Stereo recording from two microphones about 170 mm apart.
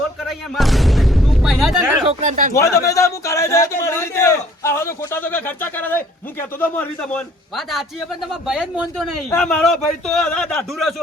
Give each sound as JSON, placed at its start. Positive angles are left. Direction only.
{"t": 0.3, "sound": "speech", "side_deg": 0}
{"t": 2.2, "sound": "speech", "side_deg": -50}
{"t": 2.5, "sound": "a man's voice", "side_deg": 20}
{"t": 7.5, "sound": "a man's voice", "side_deg": 0}
{"t": 9.3, "sound": "a man's voice", "side_deg": 5}